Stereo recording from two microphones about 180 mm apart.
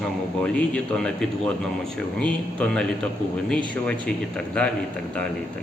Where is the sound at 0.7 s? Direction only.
5° left (ahead or behind).